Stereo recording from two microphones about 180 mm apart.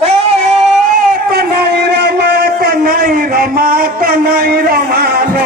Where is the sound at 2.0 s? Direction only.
65° right (ahead or behind).